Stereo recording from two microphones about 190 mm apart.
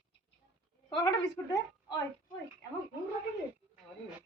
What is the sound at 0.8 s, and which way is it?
Speech, 20° left (ahead or behind).